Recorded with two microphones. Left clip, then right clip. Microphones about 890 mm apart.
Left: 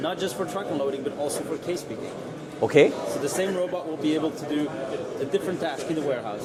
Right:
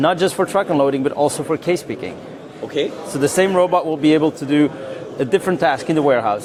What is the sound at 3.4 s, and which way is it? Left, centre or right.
A man's voice, right.